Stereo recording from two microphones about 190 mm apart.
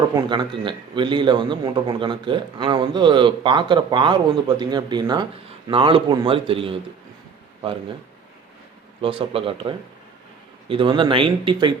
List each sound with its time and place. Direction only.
0.2 s a man's voice: 25° right (ahead or behind)
9.0 s a man's voice: 30° right (ahead or behind)